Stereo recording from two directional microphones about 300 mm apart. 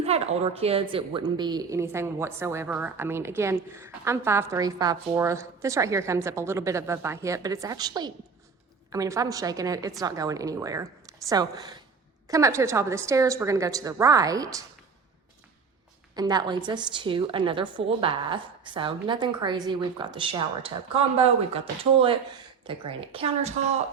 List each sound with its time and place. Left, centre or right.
0.0 s a woman's voice: right
16.1 s a woman's voice: centre